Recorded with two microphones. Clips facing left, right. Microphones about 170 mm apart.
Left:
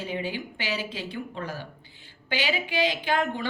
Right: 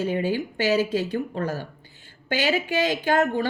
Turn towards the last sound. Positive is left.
turn(degrees=-45)  # may be behind; listen again after turning